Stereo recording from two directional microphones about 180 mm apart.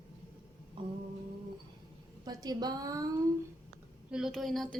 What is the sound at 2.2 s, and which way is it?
Speech, 20° right (ahead or behind).